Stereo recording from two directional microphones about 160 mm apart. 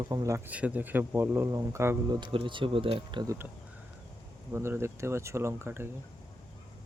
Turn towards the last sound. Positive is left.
turn(degrees=-15)  # may be behind; listen again after turning